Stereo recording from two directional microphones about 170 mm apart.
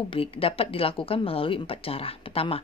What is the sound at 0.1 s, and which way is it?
Speech, 35° left (ahead or behind).